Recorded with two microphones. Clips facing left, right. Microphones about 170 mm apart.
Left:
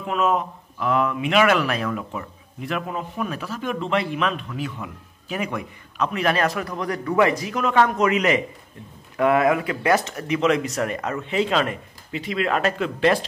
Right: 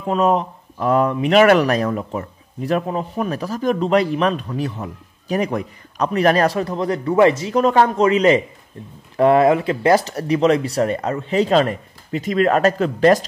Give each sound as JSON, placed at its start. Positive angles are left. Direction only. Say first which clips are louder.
{"t": 0.0, "sound": "speech", "louder": "right 5 dB", "side_deg": -35}